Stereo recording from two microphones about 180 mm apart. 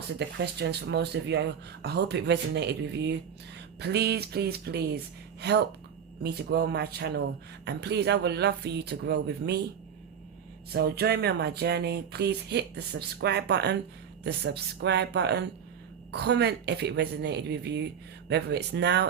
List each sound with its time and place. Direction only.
0.2 s speech: 70° right (ahead or behind)
10.7 s speech: 60° right (ahead or behind)